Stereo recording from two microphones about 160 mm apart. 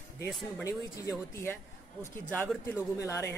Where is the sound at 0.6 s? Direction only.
20° left (ahead or behind).